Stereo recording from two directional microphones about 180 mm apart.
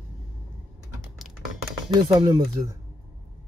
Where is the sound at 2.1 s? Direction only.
25° right (ahead or behind).